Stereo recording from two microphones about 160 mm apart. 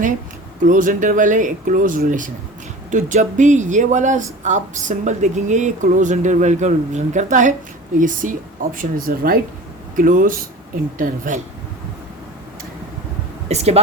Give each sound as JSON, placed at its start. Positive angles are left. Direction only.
{"t": 0.6, "sound": "speech", "side_deg": -55}
{"t": 13.5, "sound": "speech", "side_deg": -40}